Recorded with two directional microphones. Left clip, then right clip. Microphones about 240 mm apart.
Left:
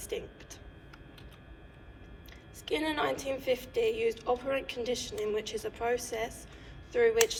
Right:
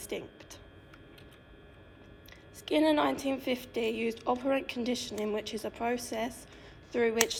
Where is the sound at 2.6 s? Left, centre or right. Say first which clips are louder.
Right 4 dB; centre.